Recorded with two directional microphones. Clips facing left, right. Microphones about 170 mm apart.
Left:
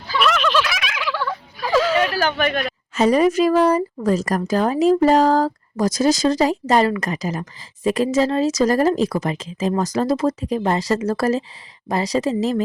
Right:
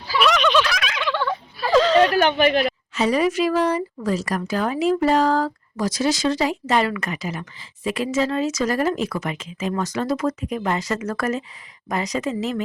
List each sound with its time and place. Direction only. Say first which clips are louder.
0.1 s a sound: right 1 dB; centre (ahead or behind)
1.6 s whimper: right 2 dB; 5° left (ahead or behind)
2.9 s speech: left 5 dB; 45° left (ahead or behind)